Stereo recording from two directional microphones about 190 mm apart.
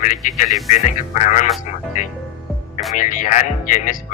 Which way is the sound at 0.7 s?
40° left (ahead or behind).